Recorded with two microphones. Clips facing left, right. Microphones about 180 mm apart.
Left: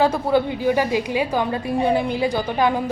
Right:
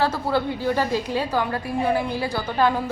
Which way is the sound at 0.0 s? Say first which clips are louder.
Left 4 dB; 15° left (ahead or behind).